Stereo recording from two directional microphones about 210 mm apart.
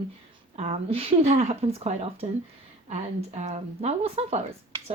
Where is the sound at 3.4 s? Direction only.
30° right (ahead or behind).